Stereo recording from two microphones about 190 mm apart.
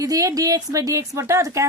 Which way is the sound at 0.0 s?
15° right (ahead or behind).